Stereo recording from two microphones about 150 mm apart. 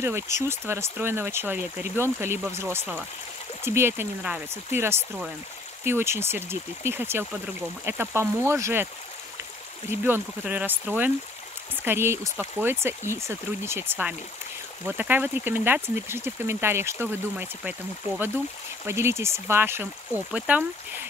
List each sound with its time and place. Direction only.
0.0 s speech: 20° right (ahead or behind)
9.8 s speech: 15° right (ahead or behind)